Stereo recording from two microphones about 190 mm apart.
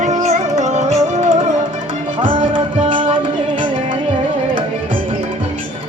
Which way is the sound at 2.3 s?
35° right (ahead or behind).